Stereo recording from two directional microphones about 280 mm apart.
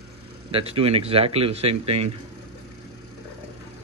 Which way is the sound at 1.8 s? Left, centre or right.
Right.